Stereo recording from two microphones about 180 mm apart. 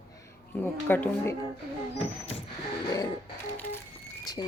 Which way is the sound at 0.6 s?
10° left (ahead or behind).